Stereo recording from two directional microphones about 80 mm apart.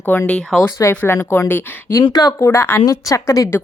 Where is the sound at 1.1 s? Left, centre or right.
Left.